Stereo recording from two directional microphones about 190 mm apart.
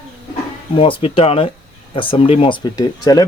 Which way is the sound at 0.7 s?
30° left (ahead or behind).